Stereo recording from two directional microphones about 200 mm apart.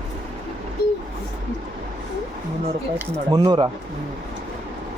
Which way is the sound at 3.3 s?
20° right (ahead or behind).